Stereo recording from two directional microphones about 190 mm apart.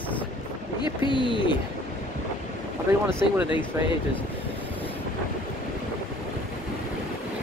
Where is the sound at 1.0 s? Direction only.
25° left (ahead or behind).